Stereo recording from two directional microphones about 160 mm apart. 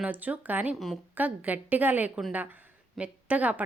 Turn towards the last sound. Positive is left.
turn(degrees=-10)  # may be behind; listen again after turning